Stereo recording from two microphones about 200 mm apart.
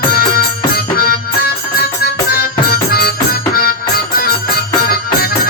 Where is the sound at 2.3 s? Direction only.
50° left (ahead or behind).